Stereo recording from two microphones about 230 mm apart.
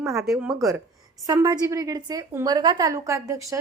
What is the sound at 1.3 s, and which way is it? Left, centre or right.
A woman's voice, centre.